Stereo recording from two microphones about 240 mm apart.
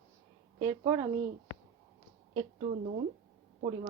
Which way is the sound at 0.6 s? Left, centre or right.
Centre.